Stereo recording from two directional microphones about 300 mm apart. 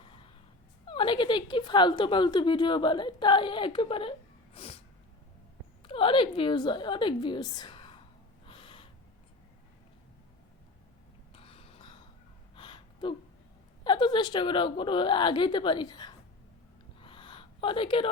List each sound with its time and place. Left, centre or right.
0.9 s a woman's voice: centre
4.5 s snort: centre
5.8 s a woman's voice: centre
8.4 s gasp: centre
11.3 s a sound: centre
12.5 s gasp: centre
13.8 s a woman's voice: centre
17.0 s a sound: centre